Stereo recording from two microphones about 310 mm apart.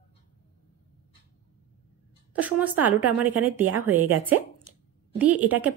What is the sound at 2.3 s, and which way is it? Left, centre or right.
A woman's voice, centre.